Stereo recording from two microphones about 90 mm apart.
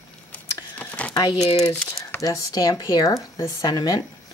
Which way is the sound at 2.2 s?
45° left (ahead or behind).